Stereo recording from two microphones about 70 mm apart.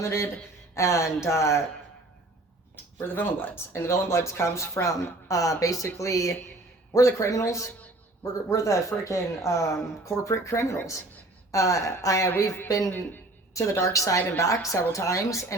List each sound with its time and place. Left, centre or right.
0.0 s speech: left
3.1 s a man's voice: left
12.9 s a woman's voice: left
13.5 s speech: left